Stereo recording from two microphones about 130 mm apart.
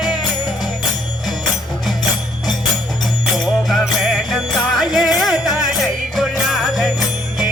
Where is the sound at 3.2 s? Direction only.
Centre (ahead or behind).